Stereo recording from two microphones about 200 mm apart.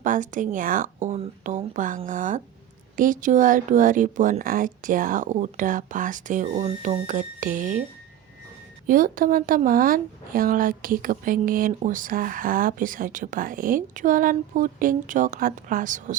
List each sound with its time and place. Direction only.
0.0 s speech: 40° right (ahead or behind)
8.9 s speech: 45° right (ahead or behind)